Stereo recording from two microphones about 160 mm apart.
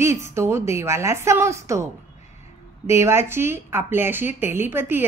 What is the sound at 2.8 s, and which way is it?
A woman's voice, 15° right (ahead or behind).